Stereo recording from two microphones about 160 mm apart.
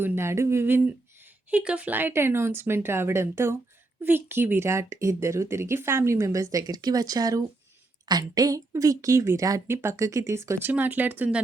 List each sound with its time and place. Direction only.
0.0 s a woman's voice: 15° right (ahead or behind)